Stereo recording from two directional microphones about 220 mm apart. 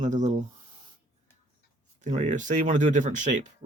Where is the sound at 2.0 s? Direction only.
30° right (ahead or behind).